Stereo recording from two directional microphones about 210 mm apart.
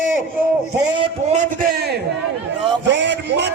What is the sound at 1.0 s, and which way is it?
Speech, 35° right (ahead or behind).